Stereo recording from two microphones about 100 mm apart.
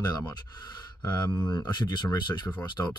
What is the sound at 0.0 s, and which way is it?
Speech, 45° left (ahead or behind).